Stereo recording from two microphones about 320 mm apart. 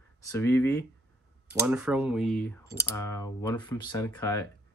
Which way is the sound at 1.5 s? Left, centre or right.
Centre.